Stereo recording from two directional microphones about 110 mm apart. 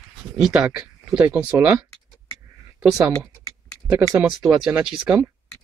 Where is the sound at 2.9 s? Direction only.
10° right (ahead or behind).